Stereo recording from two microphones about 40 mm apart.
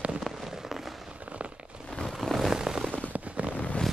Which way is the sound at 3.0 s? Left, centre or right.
Right.